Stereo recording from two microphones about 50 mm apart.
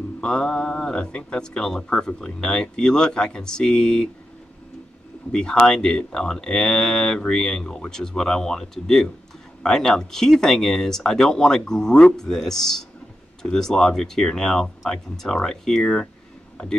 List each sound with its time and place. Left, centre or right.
0.2 s speech: centre
5.3 s speech: centre